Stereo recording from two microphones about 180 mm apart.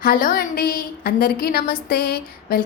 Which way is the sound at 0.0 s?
50° left (ahead or behind).